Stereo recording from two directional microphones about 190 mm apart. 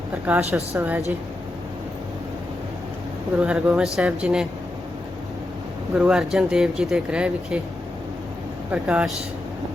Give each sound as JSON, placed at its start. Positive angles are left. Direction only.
{"t": 0.3, "sound": "a woman's voice", "side_deg": -15}
{"t": 3.3, "sound": "speech", "side_deg": -5}
{"t": 5.9, "sound": "speech", "side_deg": -5}
{"t": 8.7, "sound": "a woman's voice", "side_deg": -5}